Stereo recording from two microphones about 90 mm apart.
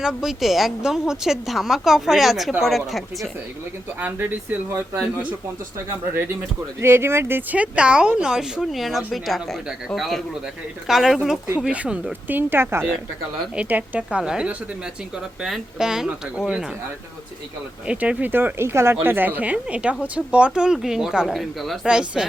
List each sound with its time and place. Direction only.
0.0 s a woman's voice: 5° right (ahead or behind)
6.7 s a woman's voice: 30° right (ahead or behind); by 12.1 s 10° right (ahead or behind)
12.3 s a woman's voice: 25° right (ahead or behind)
17.8 s a woman's voice: 15° right (ahead or behind)